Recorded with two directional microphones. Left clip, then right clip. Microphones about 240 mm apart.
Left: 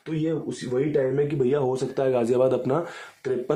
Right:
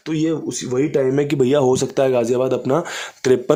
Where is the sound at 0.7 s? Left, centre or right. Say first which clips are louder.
Right 5 dB; right.